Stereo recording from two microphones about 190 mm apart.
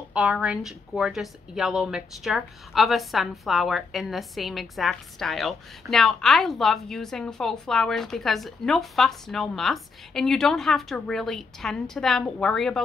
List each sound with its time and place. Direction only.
0.1 s a woman's voice: 5° right (ahead or behind)